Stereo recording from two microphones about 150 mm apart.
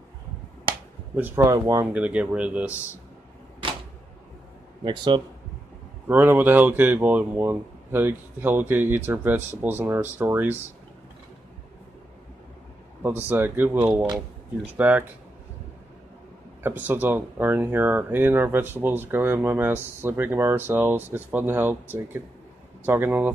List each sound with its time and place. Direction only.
1.1 s speech: 15° right (ahead or behind)
1.9 s speech: 10° right (ahead or behind)
4.8 s speech: 30° right (ahead or behind)
6.0 s speech: 15° right (ahead or behind)
13.3 s speech: 15° right (ahead or behind)
16.6 s speech: 15° right (ahead or behind)